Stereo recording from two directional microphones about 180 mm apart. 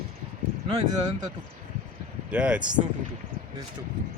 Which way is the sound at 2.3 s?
5° right (ahead or behind).